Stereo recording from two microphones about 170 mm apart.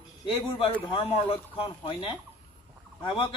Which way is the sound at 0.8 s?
30° left (ahead or behind).